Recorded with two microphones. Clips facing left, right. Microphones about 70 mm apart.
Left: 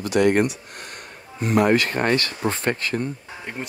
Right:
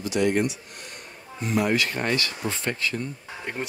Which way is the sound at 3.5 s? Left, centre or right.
Centre.